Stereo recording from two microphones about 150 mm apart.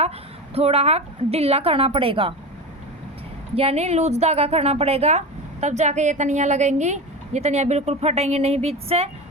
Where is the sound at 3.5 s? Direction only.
45° right (ahead or behind).